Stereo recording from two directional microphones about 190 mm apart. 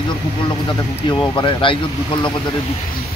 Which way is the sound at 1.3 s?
25° left (ahead or behind).